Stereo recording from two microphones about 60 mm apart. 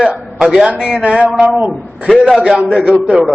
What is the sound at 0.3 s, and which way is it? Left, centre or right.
A man's voice, centre.